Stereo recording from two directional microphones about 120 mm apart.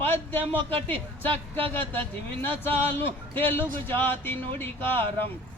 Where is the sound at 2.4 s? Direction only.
20° left (ahead or behind).